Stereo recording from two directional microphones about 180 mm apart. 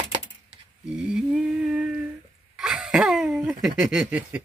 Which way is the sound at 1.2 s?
5° right (ahead or behind).